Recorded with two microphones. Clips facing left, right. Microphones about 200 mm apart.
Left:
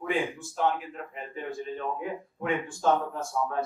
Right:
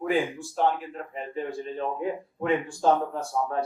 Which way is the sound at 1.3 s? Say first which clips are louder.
Right 3 dB; 35° right (ahead or behind).